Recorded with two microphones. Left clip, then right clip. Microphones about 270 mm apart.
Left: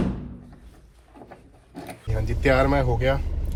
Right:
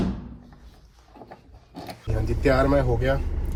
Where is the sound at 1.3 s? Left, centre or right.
Right.